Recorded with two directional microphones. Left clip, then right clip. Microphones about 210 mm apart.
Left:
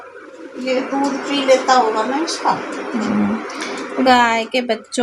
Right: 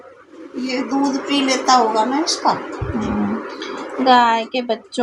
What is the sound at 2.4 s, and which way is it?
Speech, 55° right (ahead or behind).